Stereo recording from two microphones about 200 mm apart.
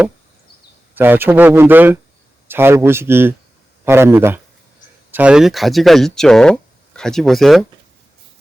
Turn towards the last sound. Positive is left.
turn(degrees=0)  # may be behind; listen again after turning